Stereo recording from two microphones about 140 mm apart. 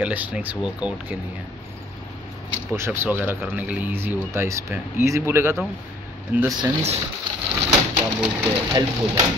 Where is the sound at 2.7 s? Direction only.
20° right (ahead or behind).